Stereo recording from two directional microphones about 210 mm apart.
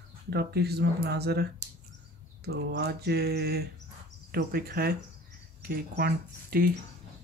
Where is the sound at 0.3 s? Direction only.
50° right (ahead or behind).